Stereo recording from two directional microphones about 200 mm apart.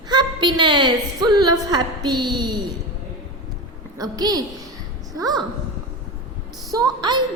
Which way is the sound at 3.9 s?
20° right (ahead or behind).